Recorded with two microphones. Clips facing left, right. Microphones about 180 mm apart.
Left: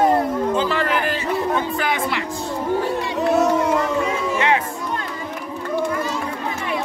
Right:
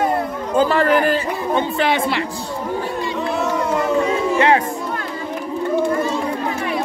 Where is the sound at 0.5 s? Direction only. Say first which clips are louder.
Right 5 dB; 45° right (ahead or behind).